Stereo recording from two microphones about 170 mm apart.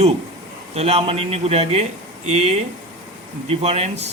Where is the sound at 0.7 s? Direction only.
40° right (ahead or behind).